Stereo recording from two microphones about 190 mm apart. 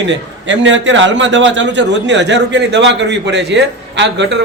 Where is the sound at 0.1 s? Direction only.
75° right (ahead or behind).